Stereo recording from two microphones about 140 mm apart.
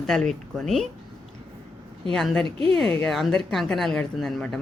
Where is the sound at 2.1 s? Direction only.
5° left (ahead or behind).